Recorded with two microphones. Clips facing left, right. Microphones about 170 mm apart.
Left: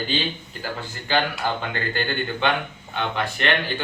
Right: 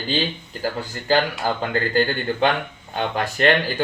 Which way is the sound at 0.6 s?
40° right (ahead or behind).